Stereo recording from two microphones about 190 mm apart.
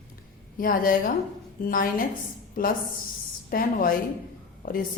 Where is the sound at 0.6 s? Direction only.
50° left (ahead or behind).